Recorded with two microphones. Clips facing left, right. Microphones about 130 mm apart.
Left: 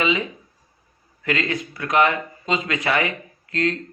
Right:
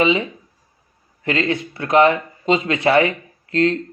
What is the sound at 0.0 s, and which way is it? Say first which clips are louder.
Speech: right 5 dB; 30° right (ahead or behind).